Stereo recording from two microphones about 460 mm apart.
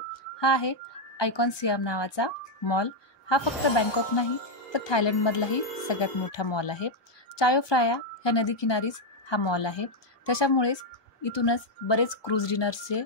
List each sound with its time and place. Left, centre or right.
0.4 s a woman's voice: left